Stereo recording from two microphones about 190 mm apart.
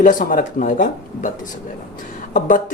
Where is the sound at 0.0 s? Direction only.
45° left (ahead or behind).